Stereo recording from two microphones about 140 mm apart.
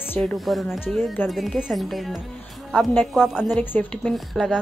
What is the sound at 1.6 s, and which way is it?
Speech, centre (ahead or behind).